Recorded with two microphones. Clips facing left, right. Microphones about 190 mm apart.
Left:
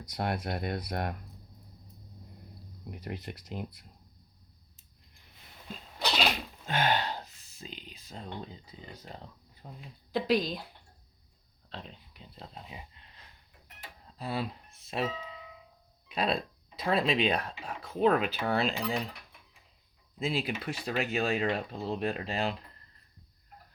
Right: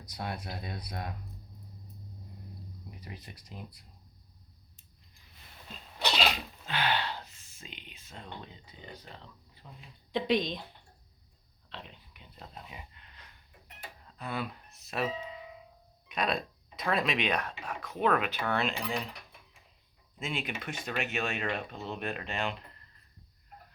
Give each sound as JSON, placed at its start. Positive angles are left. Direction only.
{"t": 0.2, "sound": "speech", "side_deg": 65}
{"t": 2.9, "sound": "speech", "side_deg": 65}
{"t": 6.7, "sound": "speech", "side_deg": 45}
{"t": 10.1, "sound": "speech", "side_deg": 5}
{"t": 11.7, "sound": "a sound", "side_deg": 35}
{"t": 14.2, "sound": "speech", "side_deg": 30}
{"t": 20.1, "sound": "speech", "side_deg": 35}